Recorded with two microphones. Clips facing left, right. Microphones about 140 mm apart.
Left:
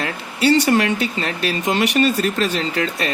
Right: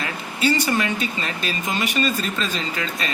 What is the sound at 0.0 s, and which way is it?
Speech, 70° left (ahead or behind).